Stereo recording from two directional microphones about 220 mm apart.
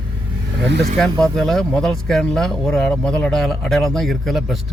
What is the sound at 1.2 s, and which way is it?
Speech, centre (ahead or behind).